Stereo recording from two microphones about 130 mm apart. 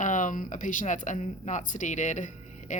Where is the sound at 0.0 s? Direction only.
75° left (ahead or behind).